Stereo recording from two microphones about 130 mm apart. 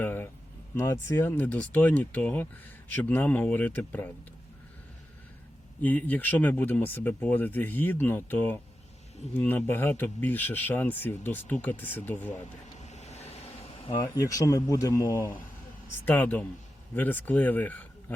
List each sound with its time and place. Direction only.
0.0 s speech: 15° left (ahead or behind)
5.8 s speech: 10° left (ahead or behind)
12.7 s vehicle: 60° left (ahead or behind)
14.1 s speech: 25° left (ahead or behind)
16.0 s speech: 15° left (ahead or behind)